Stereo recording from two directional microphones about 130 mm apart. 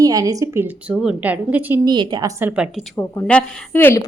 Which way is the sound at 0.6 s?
5° right (ahead or behind).